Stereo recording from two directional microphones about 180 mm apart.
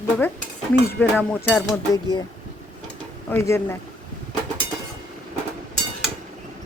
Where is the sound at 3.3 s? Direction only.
15° left (ahead or behind).